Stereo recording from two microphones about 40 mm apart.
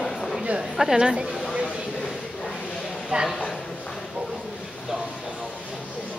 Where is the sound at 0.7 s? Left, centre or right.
Centre.